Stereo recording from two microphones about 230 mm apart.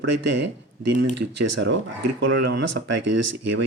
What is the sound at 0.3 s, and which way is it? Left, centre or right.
Speech, right.